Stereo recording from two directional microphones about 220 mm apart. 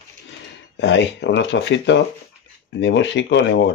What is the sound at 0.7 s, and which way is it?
Speech, 55° left (ahead or behind).